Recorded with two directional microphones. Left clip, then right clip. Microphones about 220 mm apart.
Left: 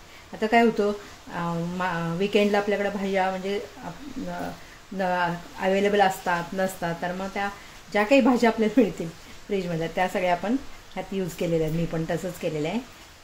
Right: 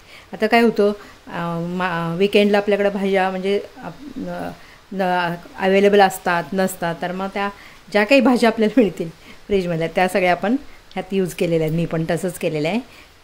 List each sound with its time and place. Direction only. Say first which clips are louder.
0.4 s a woman's voice: right 5 dB; 35° right (ahead or behind)
4.9 s a woman's voice: right 5 dB; 30° right (ahead or behind)